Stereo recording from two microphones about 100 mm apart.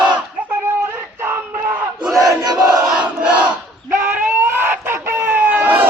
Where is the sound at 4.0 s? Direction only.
20° right (ahead or behind).